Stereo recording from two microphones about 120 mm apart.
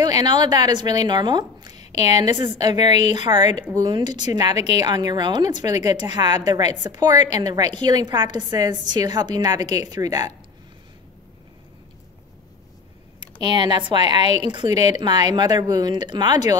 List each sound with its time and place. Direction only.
0.0 s a woman's voice: 35° right (ahead or behind)
13.5 s a woman's voice: 40° right (ahead or behind)